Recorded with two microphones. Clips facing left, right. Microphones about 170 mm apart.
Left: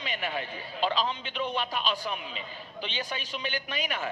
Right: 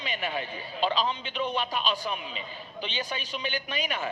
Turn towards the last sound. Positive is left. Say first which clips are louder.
# right 1 dB
turn(degrees=-15)  # may be behind; listen again after turning